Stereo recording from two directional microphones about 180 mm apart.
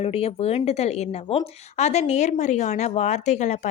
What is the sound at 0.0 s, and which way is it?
A woman's voice, 35° left (ahead or behind).